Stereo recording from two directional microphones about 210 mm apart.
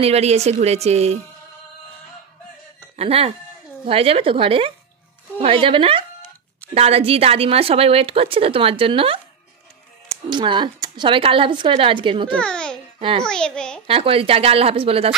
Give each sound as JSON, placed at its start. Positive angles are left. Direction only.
{"t": 0.0, "sound": "speech", "side_deg": -30}
{"t": 3.0, "sound": "speech", "side_deg": -30}
{"t": 10.3, "sound": "speech", "side_deg": -20}
{"t": 12.4, "sound": "babbling", "side_deg": 5}
{"t": 13.2, "sound": "a child's voice", "side_deg": 5}
{"t": 13.8, "sound": "speech", "side_deg": -25}